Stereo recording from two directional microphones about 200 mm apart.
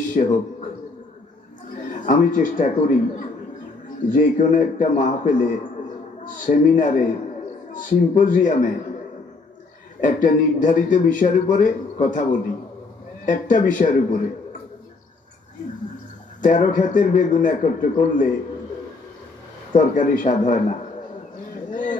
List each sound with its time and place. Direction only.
0.2 s a man's voice: 40° left (ahead or behind)
1.8 s a man's voice: 40° left (ahead or behind)
9.9 s a man's voice: 40° left (ahead or behind)
16.3 s a man's voice: 40° left (ahead or behind)
19.7 s a man's voice: 40° left (ahead or behind)
21.6 s a sound: 40° left (ahead or behind)